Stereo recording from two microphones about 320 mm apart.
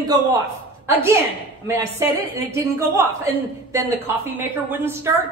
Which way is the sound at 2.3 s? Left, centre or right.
Centre.